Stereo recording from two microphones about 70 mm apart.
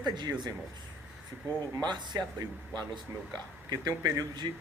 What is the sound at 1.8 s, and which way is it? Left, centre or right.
Speech, right.